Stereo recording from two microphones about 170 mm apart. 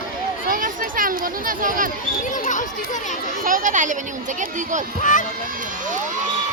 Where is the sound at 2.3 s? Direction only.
45° left (ahead or behind).